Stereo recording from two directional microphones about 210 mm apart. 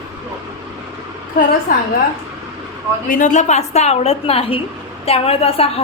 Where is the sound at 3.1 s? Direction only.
35° left (ahead or behind).